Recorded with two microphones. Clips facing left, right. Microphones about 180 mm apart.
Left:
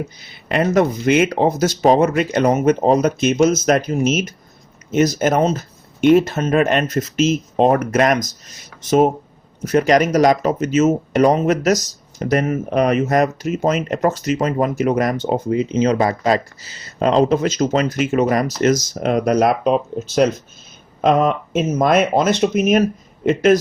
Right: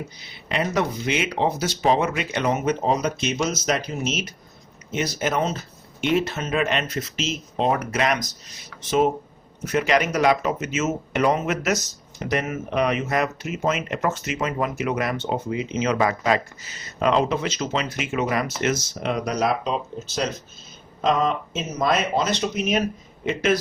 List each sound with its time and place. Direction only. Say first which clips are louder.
0.2 s speech: left 7 dB; 50° left (ahead or behind)